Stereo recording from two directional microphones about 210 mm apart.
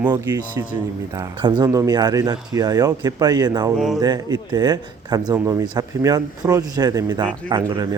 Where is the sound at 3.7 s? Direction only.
Centre (ahead or behind).